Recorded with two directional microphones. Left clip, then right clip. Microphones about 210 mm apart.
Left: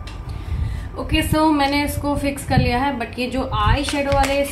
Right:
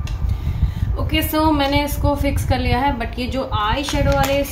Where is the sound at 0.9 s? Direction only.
5° left (ahead or behind).